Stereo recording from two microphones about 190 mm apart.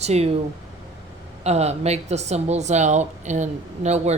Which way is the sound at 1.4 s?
35° right (ahead or behind).